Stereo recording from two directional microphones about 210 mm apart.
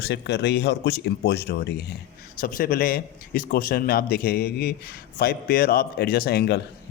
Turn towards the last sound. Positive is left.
turn(degrees=50)  # may be behind; listen again after turning